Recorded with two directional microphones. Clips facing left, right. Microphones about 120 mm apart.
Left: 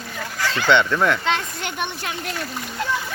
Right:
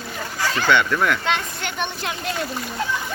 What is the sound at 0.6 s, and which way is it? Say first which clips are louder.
Speech: left 2 dB; 25° left (ahead or behind).